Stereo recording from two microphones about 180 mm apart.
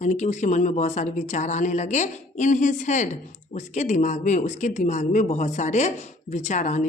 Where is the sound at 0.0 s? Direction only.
40° left (ahead or behind).